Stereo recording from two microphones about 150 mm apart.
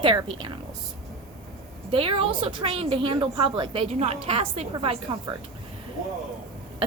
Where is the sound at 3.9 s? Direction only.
45° right (ahead or behind).